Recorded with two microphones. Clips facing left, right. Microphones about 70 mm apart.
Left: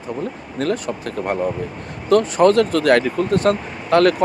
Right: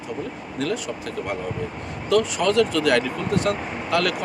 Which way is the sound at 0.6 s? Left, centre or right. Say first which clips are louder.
Left 5 dB; left.